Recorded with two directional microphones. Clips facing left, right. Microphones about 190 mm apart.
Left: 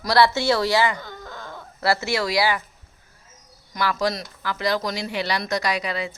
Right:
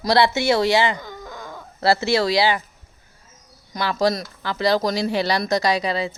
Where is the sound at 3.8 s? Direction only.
30° right (ahead or behind).